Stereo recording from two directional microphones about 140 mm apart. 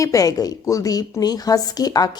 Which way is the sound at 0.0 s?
25° left (ahead or behind).